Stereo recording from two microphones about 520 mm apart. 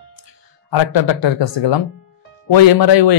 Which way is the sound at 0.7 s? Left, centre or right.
Left.